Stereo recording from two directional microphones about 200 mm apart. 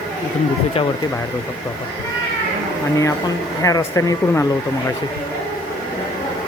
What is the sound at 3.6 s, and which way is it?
Speech, 15° left (ahead or behind).